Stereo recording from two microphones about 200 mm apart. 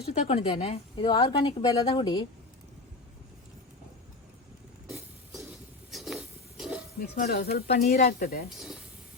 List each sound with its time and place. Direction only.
0.1 s a woman's voice: 30° left (ahead or behind)
4.9 s a sound: centre (ahead or behind)
7.2 s speech: 50° left (ahead or behind)
8.4 s speech: centre (ahead or behind)